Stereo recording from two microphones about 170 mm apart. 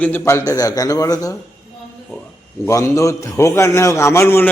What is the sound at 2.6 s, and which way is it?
A man's voice, 20° left (ahead or behind).